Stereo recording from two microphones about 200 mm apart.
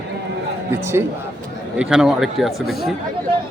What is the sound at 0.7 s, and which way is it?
A man's voice, 10° right (ahead or behind).